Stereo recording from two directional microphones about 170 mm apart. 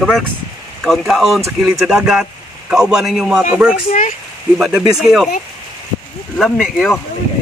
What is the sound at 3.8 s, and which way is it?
Speech, 40° left (ahead or behind).